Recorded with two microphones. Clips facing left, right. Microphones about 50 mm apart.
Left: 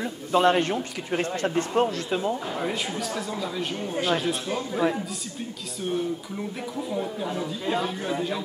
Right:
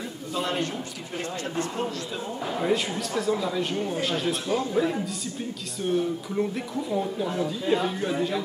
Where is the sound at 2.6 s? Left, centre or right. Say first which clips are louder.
Right 3 dB; centre.